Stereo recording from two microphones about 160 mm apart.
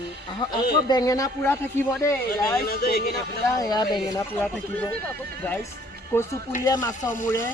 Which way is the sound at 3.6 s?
25° left (ahead or behind).